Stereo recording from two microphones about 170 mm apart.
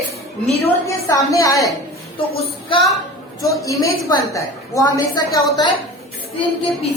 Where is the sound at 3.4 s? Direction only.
20° left (ahead or behind).